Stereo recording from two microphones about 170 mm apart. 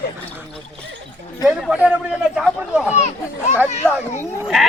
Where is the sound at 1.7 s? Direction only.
5° right (ahead or behind).